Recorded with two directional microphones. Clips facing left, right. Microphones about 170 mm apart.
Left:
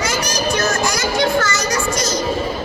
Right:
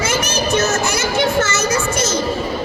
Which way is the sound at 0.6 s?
25° right (ahead or behind).